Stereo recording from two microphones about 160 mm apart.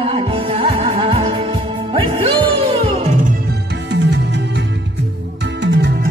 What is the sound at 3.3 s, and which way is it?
Music, 80° right.